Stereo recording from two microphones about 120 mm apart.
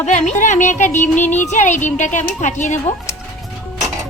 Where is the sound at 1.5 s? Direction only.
85° left.